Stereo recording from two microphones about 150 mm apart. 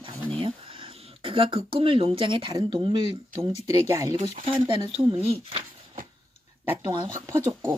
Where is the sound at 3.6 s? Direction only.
20° right (ahead or behind).